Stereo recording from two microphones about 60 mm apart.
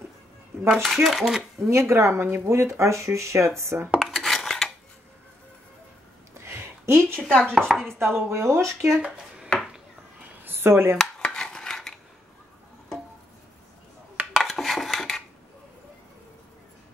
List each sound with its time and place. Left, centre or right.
0.8 s speech: centre
1.7 s speech: right
4.0 s dishes: centre
6.4 s a sound: right
7.2 s chopping: centre
7.5 s speech: centre
8.0 s speech: right
9.0 s a sound: centre
10.4 s a sound: right
11.0 s cutlery: centre
14.3 s dishes: centre